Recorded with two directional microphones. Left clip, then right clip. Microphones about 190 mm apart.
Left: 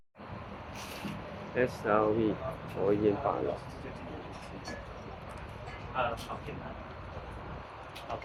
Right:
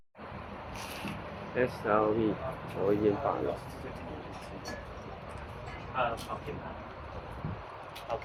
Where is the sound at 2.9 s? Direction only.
Centre (ahead or behind).